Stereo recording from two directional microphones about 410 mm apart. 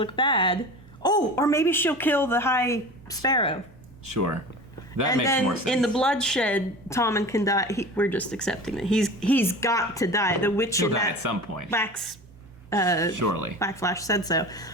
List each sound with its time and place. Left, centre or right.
0.0 s a woman's voice: centre
4.0 s speech: right
5.0 s speech: centre
11.2 s speech: right
11.7 s a woman's voice: centre
13.1 s speech: right
13.6 s a woman's voice: centre